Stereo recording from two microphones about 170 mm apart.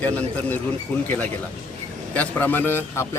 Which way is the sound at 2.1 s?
10° left (ahead or behind).